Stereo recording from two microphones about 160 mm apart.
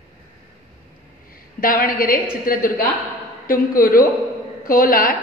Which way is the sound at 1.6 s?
65° left (ahead or behind).